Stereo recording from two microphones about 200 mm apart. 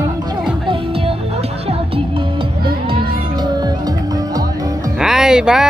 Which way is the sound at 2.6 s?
25° right (ahead or behind).